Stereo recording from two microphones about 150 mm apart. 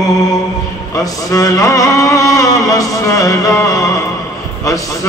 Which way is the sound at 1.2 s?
25° left (ahead or behind).